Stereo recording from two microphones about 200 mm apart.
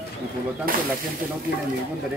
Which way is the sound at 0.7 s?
45° right (ahead or behind).